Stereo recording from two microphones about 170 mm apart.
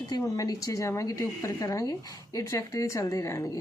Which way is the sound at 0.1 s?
20° left (ahead or behind).